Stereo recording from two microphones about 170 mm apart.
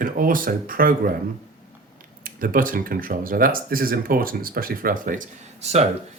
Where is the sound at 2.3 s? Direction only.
55° right (ahead or behind).